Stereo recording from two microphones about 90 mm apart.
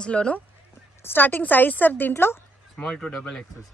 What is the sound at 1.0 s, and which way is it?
A woman's voice, 20° left (ahead or behind).